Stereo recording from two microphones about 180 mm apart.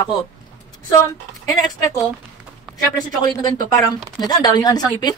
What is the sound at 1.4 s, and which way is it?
Speech, 20° left (ahead or behind).